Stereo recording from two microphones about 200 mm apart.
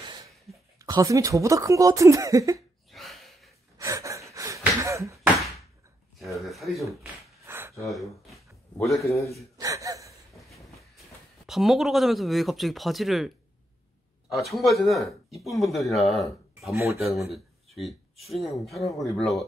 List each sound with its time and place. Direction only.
0.7 s speech: 20° right (ahead or behind)
2.9 s gasp: centre (ahead or behind)
3.7 s gasp: 15° right (ahead or behind)
6.4 s speech: centre (ahead or behind)
7.4 s a sound: 10° right (ahead or behind)
7.9 s speech: centre (ahead or behind)
9.6 s gasp: 15° right (ahead or behind)
11.4 s speech: centre (ahead or behind)
14.3 s speech: centre (ahead or behind)
16.7 s speech: 15° right (ahead or behind)
17.3 s speech: centre (ahead or behind)